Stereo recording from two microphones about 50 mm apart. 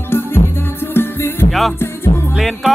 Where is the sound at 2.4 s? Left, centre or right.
Centre.